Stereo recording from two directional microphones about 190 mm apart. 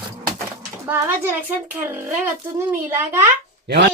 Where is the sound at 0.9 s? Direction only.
10° right (ahead or behind).